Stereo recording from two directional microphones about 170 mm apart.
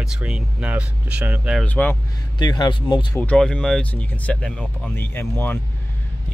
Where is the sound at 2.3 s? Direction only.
25° left (ahead or behind).